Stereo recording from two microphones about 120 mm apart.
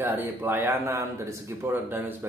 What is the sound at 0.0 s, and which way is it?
Speech, 15° right (ahead or behind).